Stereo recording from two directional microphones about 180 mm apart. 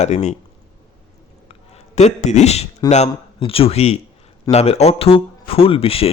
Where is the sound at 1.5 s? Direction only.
35° left (ahead or behind).